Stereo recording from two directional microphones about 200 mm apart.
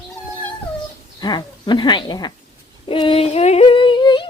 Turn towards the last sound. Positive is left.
turn(degrees=25)  # may be behind; listen again after turning